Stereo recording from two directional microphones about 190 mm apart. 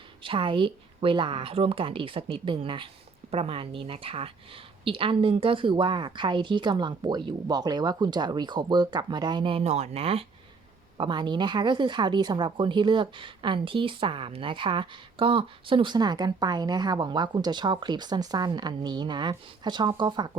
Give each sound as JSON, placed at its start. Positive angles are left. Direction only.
{"t": 0.2, "sound": "speech", "side_deg": -25}